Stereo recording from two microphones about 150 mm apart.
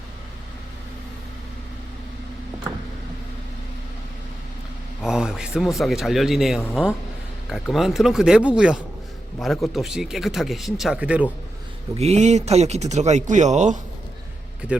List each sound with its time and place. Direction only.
5.0 s a man's voice: 5° right (ahead or behind)
11.9 s speech: 45° right (ahead or behind)